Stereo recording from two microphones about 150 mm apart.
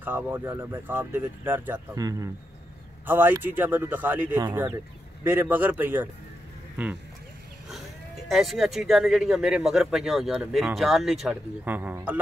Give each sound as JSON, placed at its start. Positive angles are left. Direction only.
{"t": 0.0, "sound": "speech", "side_deg": -15}
{"t": 3.1, "sound": "speech", "side_deg": -15}
{"t": 8.3, "sound": "speech", "side_deg": 0}